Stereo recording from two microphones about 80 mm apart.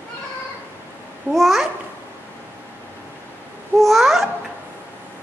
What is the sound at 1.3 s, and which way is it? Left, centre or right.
Babbling, centre.